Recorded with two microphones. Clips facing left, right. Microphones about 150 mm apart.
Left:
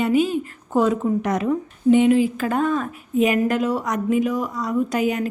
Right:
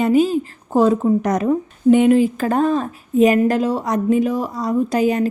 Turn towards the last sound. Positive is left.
turn(degrees=-35)  # may be behind; listen again after turning